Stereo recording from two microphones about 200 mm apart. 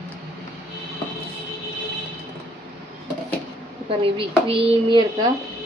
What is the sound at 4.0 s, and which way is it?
Speech, 25° right (ahead or behind).